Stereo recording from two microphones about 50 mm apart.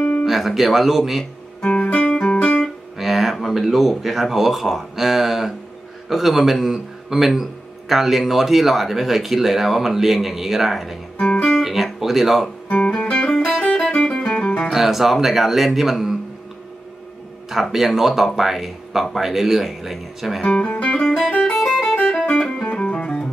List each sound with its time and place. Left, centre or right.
0.2 s speech: centre
1.6 s guitar: left
2.3 s music: left
3.0 s speech: centre
11.1 s speech: left
11.5 s speech: centre
12.6 s music: left
14.7 s speech: centre
17.5 s speech: centre
20.6 s music: left
21.5 s music: centre
22.4 s music: centre